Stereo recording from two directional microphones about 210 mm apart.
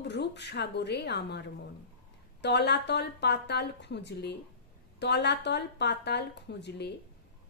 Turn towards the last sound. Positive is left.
turn(degrees=50)  # may be behind; listen again after turning